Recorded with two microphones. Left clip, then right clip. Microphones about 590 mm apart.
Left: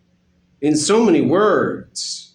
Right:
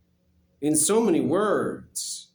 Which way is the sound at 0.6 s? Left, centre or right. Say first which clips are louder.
Left 7 dB; right.